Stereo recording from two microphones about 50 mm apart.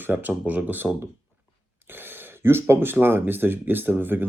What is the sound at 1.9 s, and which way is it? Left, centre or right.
Speech, right.